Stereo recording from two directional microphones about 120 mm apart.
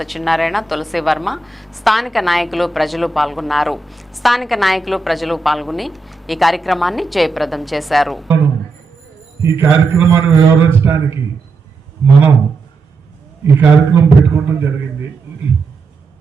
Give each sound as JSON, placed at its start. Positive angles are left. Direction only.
{"t": 0.0, "sound": "a woman's voice", "side_deg": 0}
{"t": 9.4, "sound": "a man's voice", "side_deg": -20}
{"t": 13.6, "sound": "a man's voice", "side_deg": -15}